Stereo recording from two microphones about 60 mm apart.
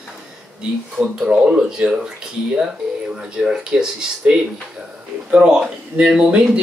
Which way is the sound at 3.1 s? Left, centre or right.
Centre.